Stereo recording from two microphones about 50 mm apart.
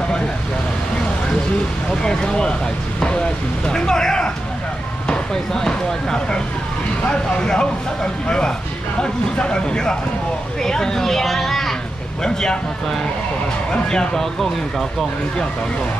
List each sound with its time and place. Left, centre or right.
1.9 s speech: centre
3.6 s speech: centre